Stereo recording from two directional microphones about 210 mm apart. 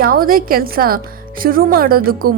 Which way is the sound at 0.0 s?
45° right (ahead or behind).